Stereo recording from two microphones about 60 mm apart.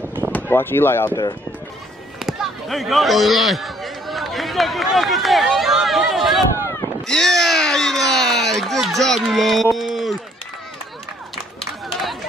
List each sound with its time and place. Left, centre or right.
0.5 s speech: left
2.1 s speech: centre
7.1 s a sound: centre
9.8 s speech: centre
11.6 s run: centre